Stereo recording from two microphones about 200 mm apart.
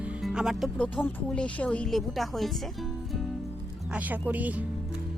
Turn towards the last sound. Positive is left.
turn(degrees=-5)  # may be behind; listen again after turning